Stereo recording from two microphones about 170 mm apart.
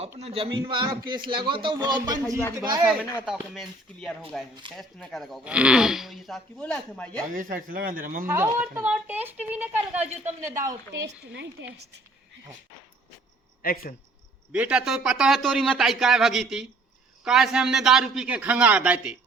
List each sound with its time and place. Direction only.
0.2 s speech: 35° right (ahead or behind)
3.5 s speech: centre (ahead or behind)
7.3 s a man's voice: 50° right (ahead or behind)
8.3 s a woman's voice: 10° right (ahead or behind)
10.9 s a woman's voice: 90° right
13.6 s speech: 60° left (ahead or behind)
14.5 s speech: 5° right (ahead or behind)